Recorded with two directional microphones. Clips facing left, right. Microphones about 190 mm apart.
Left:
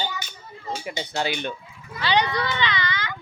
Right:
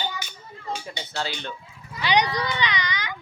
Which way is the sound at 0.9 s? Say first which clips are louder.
Left 4 dB; 15° left (ahead or behind).